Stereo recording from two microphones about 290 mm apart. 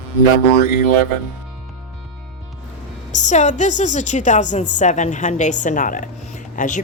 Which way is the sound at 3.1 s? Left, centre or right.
Left.